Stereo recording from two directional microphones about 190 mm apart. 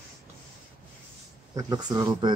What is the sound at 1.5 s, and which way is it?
Speech, 20° right (ahead or behind).